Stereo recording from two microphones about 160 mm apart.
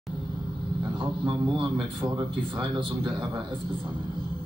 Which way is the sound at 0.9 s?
30° right (ahead or behind).